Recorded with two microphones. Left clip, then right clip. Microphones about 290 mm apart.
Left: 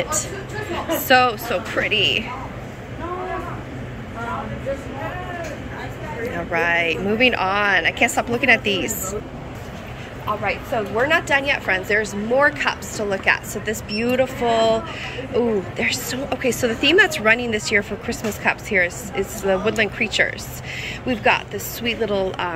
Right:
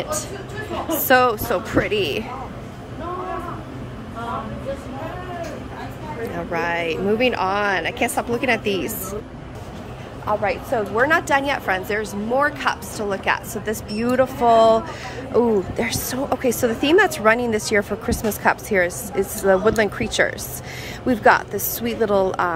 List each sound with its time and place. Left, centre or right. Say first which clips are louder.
0.9 s speech: even; centre
6.3 s speech: left 4 dB; centre
10.4 s speech: right 1 dB; centre